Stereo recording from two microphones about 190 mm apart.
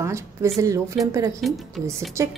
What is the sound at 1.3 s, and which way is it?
Speech, centre (ahead or behind).